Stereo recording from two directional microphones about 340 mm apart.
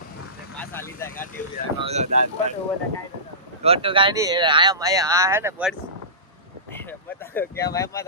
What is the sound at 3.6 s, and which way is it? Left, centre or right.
Speech, centre.